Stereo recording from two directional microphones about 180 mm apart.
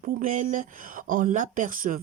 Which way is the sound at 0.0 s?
45° right (ahead or behind).